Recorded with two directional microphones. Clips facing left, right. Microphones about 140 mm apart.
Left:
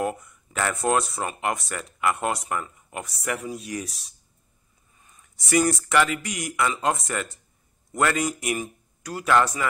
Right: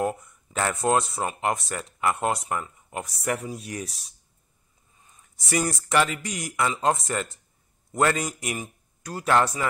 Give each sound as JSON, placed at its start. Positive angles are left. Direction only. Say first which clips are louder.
{"t": 0.0, "sound": "speech", "louder": "right 1 dB", "side_deg": -30}
{"t": 5.0, "sound": "speech", "louder": "left 1 dB", "side_deg": -25}